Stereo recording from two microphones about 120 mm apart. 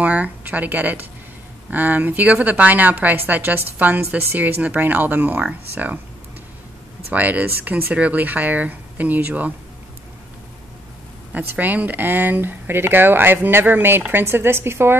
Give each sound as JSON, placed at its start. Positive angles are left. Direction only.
{"t": 0.0, "sound": "speech", "side_deg": -10}
{"t": 7.1, "sound": "speech", "side_deg": -10}
{"t": 11.3, "sound": "speech", "side_deg": -15}